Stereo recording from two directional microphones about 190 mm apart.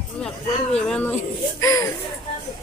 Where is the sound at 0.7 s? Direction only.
5° left (ahead or behind).